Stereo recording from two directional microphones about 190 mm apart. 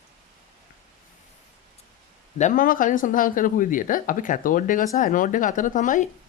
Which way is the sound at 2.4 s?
45° left (ahead or behind).